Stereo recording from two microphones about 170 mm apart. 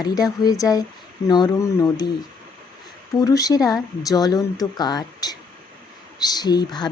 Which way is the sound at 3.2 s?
20° left (ahead or behind).